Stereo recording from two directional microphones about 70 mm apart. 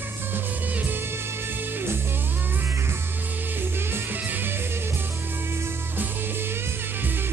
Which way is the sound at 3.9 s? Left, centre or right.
Right.